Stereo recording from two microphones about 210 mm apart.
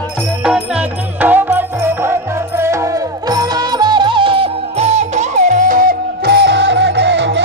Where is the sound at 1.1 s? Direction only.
10° right (ahead or behind).